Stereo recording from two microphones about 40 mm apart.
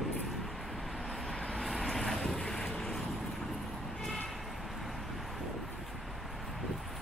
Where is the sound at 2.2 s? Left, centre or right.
Left.